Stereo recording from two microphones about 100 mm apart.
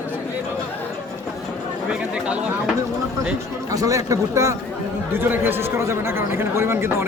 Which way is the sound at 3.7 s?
35° right (ahead or behind).